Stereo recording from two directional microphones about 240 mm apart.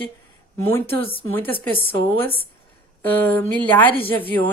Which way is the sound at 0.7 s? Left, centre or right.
Centre.